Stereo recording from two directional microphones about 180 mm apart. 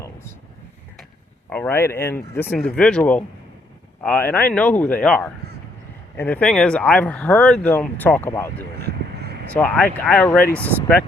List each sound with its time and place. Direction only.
1.5 s speech: 10° left (ahead or behind)
8.8 s vehicle: 65° right (ahead or behind)
9.5 s speech: 10° left (ahead or behind)